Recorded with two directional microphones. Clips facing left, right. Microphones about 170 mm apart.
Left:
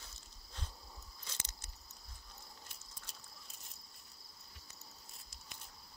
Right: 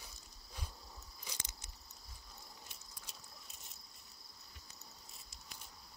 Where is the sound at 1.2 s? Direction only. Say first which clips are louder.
Right 1 dB; 15° right (ahead or behind).